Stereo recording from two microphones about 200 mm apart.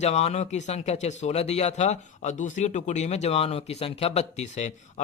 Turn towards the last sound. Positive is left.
turn(degrees=35)  # may be behind; listen again after turning